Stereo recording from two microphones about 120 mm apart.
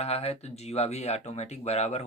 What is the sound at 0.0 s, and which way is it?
Speech, 60° left (ahead or behind).